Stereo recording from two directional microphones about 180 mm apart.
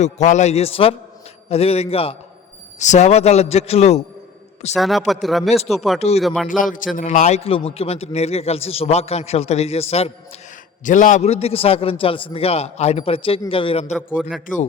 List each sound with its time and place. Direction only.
0.0 s a man's voice: 40° left (ahead or behind)
4.7 s speech: centre (ahead or behind)
6.5 s a man's voice: 45° left (ahead or behind)
10.8 s a man's voice: 45° left (ahead or behind)
14.2 s speech: 5° left (ahead or behind)